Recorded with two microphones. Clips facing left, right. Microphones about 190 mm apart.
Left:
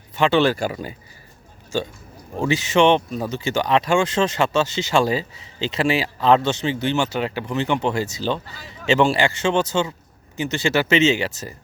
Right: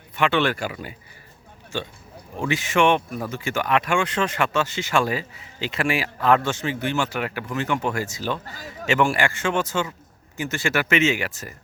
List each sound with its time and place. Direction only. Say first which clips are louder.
0.2 s speech: left 4 dB; 30° left (ahead or behind)
2.3 s speech: left 4 dB; 25° left (ahead or behind)
8.4 s speech: right 3 dB; 40° right (ahead or behind)
8.9 s speech: left 3 dB; 25° left (ahead or behind)